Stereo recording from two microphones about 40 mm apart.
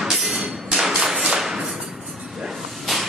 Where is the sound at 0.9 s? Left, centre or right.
Centre.